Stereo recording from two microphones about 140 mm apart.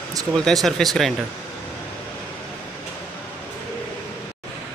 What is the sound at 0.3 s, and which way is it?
Speech, centre (ahead or behind).